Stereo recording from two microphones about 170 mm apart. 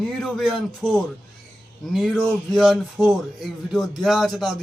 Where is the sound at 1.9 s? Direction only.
Centre (ahead or behind).